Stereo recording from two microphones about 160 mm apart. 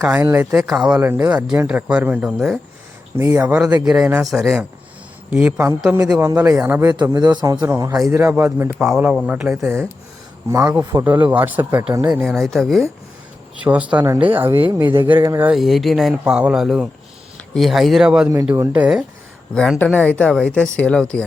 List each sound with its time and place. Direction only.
0.0 s speech: 10° right (ahead or behind)
3.2 s speech: 15° right (ahead or behind)
6.9 s a man's voice: 25° right (ahead or behind)
10.9 s speech: 10° right (ahead or behind)
15.5 s speech: centre (ahead or behind)
18.5 s a man's voice: 20° right (ahead or behind)
18.8 s speech: 5° right (ahead or behind)